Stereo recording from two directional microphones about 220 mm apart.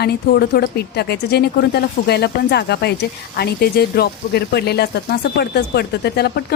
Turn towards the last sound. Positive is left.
turn(degrees=45)  # may be behind; listen again after turning